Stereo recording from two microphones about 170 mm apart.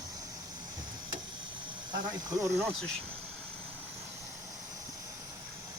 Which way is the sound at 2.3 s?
20° right (ahead or behind).